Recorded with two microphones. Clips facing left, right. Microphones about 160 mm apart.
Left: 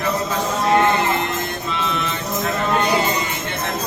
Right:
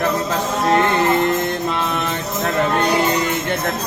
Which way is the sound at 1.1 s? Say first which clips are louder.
Right 6 dB; 50° right (ahead or behind).